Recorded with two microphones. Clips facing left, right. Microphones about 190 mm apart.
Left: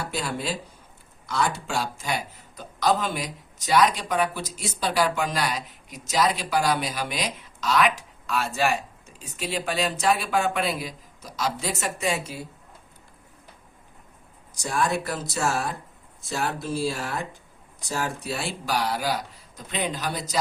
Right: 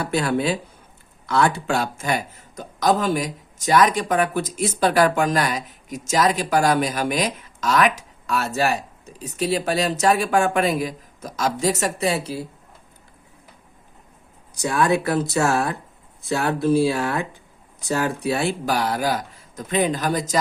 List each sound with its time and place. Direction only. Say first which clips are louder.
0.0 s a man's voice: right 8 dB; 60° right (ahead or behind); by 12.5 s 35° right (ahead or behind)
14.5 s a man's voice: right 6 dB; 60° right (ahead or behind); by 20.4 s 45° right (ahead or behind)